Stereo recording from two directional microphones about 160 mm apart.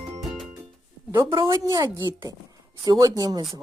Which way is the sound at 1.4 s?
20° right (ahead or behind).